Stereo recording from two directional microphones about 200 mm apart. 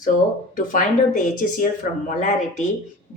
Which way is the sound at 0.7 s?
40° left (ahead or behind).